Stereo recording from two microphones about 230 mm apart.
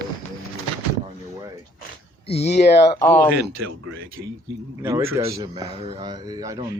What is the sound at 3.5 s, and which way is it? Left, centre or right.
Speech, right.